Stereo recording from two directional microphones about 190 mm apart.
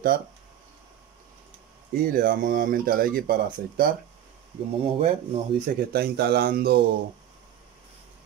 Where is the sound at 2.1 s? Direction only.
50° right (ahead or behind).